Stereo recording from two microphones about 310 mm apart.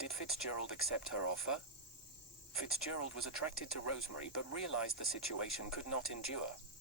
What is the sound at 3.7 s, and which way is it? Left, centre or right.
Speech, left.